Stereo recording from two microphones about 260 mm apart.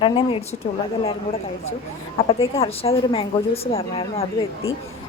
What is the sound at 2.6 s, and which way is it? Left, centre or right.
A woman's voice, left.